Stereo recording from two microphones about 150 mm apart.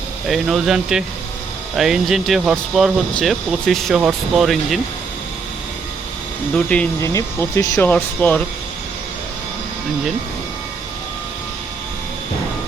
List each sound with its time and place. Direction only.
0.3 s speech: centre (ahead or behind)
7.0 s speech: 20° left (ahead or behind)